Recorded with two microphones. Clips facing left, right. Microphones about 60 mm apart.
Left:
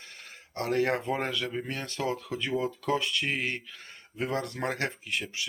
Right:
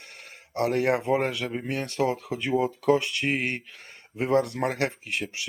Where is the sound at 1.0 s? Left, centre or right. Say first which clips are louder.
Right 5 dB; right.